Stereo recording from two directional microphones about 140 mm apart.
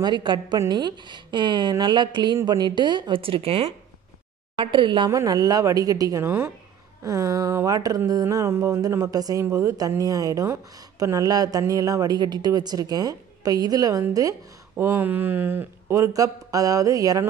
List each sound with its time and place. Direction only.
0.0 s a woman's voice: 35° right (ahead or behind)
5.1 s speech: 25° right (ahead or behind)